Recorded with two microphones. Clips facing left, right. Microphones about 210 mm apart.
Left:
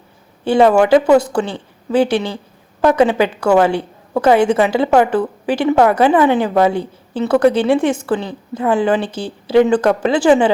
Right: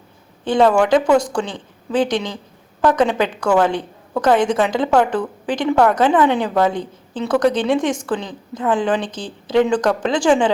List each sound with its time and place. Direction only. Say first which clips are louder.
0.4 s a woman's voice: left 3 dB; 10° left (ahead or behind)